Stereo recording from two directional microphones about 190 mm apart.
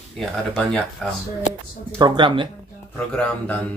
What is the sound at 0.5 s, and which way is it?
Speech, 5° left (ahead or behind).